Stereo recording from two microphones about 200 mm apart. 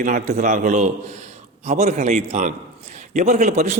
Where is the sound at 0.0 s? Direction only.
40° right (ahead or behind).